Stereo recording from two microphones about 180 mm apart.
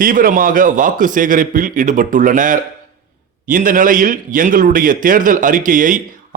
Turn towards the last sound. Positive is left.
turn(degrees=-50)  # may be behind; listen again after turning